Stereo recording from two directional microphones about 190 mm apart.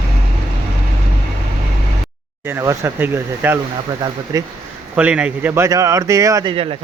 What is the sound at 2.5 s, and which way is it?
A man's voice, 15° right (ahead or behind).